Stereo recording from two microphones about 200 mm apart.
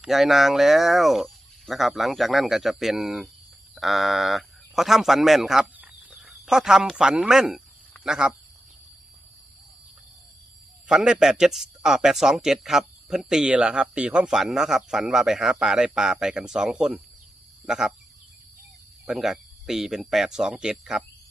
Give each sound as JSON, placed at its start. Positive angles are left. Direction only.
{"t": 0.0, "sound": "speech", "side_deg": 0}
{"t": 10.8, "sound": "speech", "side_deg": -5}
{"t": 19.0, "sound": "speech", "side_deg": 0}